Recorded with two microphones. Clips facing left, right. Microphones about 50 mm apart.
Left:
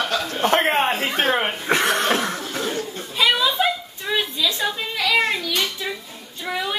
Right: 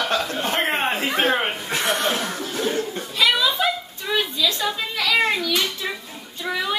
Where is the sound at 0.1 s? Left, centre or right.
Right.